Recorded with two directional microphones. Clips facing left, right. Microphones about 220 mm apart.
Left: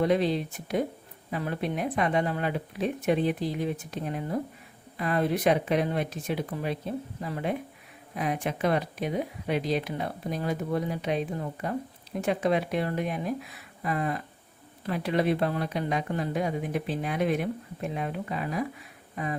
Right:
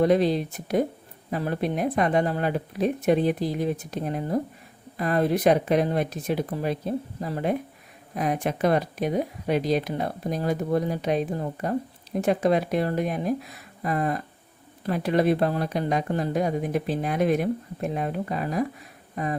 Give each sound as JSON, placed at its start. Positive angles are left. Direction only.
{"t": 0.0, "sound": "speech", "side_deg": -40}